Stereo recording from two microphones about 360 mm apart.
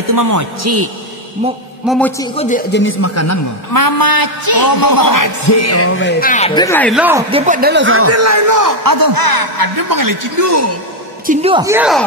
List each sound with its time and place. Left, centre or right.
0.1 s speech: right
1.9 s a man's voice: centre
2.3 s speech: left
3.7 s music: left; by 10.7 s right
11.2 s music: centre